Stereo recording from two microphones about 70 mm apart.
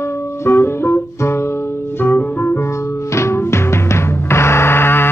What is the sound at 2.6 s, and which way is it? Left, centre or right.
Music, left.